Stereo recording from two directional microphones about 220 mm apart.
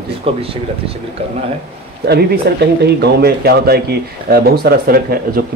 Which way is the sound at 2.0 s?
45° right (ahead or behind).